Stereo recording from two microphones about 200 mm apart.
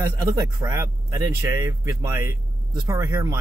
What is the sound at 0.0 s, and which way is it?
Speech, 15° right (ahead or behind).